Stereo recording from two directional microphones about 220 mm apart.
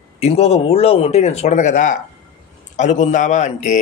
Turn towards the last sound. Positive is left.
turn(degrees=35)  # may be behind; listen again after turning